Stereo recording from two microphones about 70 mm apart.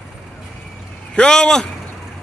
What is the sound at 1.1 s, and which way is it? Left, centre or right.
Speech, centre.